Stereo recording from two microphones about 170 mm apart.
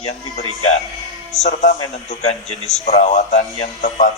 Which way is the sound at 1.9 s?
40° left (ahead or behind).